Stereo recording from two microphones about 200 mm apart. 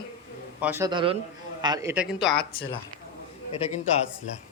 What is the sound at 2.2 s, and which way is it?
Speech, 55° left (ahead or behind).